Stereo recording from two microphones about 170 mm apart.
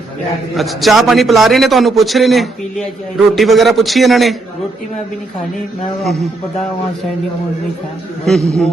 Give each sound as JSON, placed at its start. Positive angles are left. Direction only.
{"t": 0.5, "sound": "a man's voice", "side_deg": 0}
{"t": 6.0, "sound": "a man's voice", "side_deg": 0}
{"t": 8.2, "sound": "a man's voice", "side_deg": 0}